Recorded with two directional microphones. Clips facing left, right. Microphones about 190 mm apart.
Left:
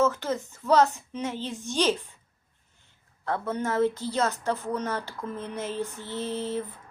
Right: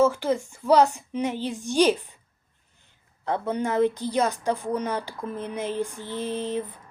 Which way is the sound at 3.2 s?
15° right (ahead or behind).